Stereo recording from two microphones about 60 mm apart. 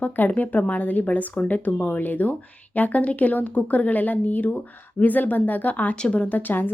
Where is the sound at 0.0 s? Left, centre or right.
Left.